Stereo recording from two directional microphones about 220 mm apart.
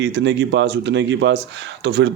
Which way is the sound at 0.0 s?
55° right (ahead or behind).